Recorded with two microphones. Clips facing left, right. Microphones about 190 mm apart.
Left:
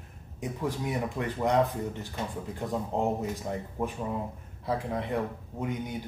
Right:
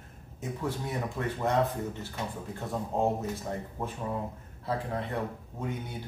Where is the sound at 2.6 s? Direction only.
15° left (ahead or behind).